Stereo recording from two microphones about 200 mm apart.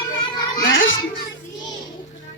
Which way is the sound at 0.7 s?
75° left (ahead or behind).